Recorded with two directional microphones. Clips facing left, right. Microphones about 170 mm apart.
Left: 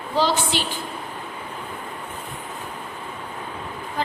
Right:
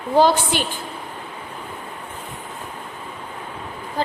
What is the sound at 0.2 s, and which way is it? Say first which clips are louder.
Speech: right 5 dB; 50° right (ahead or behind).